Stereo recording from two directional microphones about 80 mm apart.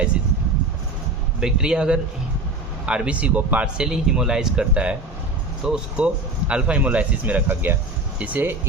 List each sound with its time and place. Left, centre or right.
1.4 s speech: centre
3.8 s speech: centre